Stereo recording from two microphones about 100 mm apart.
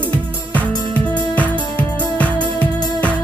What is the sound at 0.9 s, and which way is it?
Music, 50° left (ahead or behind).